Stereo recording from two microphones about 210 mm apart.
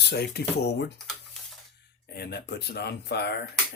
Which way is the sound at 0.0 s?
50° left (ahead or behind).